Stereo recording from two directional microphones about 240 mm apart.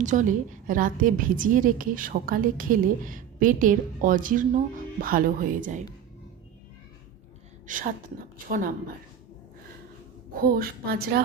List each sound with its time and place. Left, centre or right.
0.0 s a woman's voice: right
7.7 s a woman's voice: right
10.4 s a woman's voice: right